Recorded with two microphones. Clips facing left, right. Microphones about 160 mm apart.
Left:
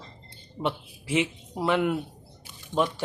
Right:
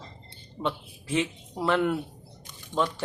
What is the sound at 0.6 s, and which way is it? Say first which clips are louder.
Speech: left 1 dB; 15° left (ahead or behind).